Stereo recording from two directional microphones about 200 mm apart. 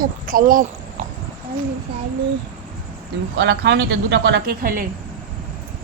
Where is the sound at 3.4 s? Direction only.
60° right (ahead or behind).